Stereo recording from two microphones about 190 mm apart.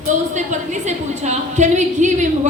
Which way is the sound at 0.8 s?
40° right (ahead or behind).